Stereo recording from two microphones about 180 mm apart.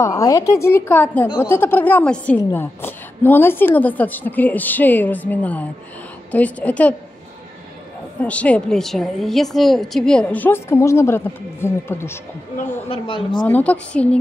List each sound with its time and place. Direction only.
0.0 s a woman's voice: 20° left (ahead or behind)
8.2 s a woman's voice: 5° left (ahead or behind)
12.8 s speech: 30° left (ahead or behind)
13.4 s a woman's voice: 10° left (ahead or behind)